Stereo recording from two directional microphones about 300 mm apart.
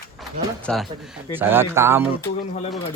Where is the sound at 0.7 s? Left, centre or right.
Centre.